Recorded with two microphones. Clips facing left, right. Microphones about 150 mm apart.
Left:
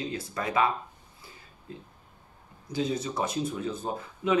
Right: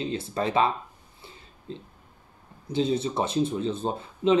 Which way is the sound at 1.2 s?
25° right (ahead or behind).